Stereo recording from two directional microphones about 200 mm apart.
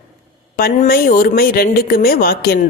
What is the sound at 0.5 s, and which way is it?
A woman's voice, 45° left (ahead or behind).